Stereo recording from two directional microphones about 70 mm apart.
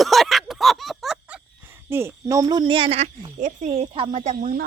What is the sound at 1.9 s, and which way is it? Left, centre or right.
Speech, right.